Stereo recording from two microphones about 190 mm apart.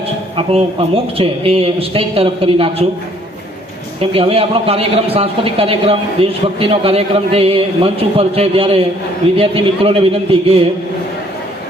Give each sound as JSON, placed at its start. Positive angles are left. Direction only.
{"t": 0.3, "sound": "speech", "side_deg": -30}
{"t": 4.0, "sound": "a man's voice", "side_deg": -30}